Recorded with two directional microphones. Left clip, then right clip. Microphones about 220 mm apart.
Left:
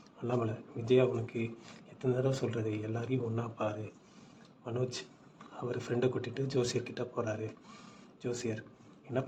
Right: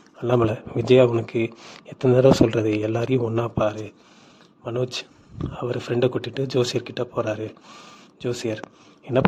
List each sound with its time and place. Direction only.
0.3 s a man's voice: 50° right (ahead or behind)
4.6 s speech: 40° right (ahead or behind)